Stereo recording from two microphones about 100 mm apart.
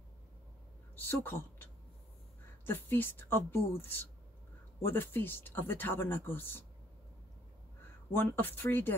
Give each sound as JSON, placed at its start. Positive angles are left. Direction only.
{"t": 0.9, "sound": "a woman's voice", "side_deg": 20}
{"t": 8.1, "sound": "speech", "side_deg": 20}